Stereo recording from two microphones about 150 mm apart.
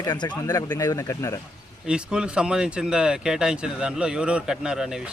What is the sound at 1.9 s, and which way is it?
Speech, 5° right (ahead or behind).